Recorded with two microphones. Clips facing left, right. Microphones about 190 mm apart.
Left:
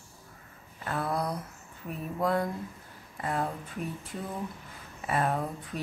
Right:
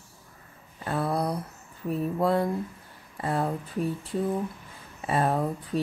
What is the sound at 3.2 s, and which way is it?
Speech, 30° right (ahead or behind).